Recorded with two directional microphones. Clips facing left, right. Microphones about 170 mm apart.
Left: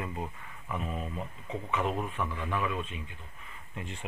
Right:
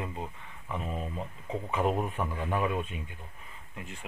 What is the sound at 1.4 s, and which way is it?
Speech, 40° right (ahead or behind).